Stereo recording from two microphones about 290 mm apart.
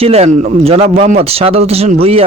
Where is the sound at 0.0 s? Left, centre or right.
Right.